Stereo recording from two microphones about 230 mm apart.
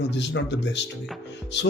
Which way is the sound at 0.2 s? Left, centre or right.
Left.